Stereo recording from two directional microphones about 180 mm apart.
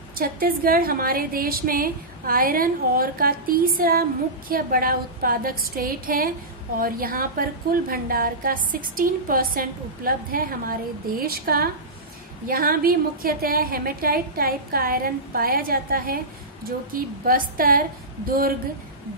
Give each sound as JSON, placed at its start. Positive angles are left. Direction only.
{"t": 0.1, "sound": "a woman's voice", "side_deg": -55}